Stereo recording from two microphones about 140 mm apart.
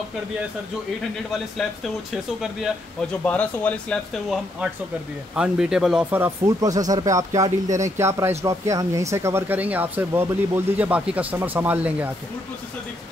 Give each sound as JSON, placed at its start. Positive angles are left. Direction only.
{"t": 1.6, "sound": "speech", "side_deg": 0}
{"t": 3.3, "sound": "speech", "side_deg": 10}
{"t": 5.3, "sound": "speech", "side_deg": -5}
{"t": 6.1, "sound": "speech", "side_deg": -20}